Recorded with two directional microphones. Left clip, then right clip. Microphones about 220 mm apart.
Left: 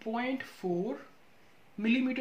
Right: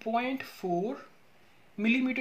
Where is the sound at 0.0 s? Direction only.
40° right (ahead or behind).